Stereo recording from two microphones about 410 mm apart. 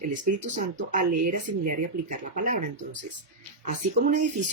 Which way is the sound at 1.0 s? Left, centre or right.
Right.